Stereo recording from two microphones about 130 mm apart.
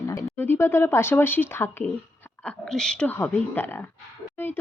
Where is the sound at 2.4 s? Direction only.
5° left (ahead or behind).